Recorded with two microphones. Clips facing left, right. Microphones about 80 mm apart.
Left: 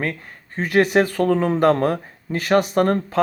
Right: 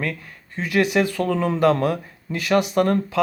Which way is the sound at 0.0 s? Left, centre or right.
Left.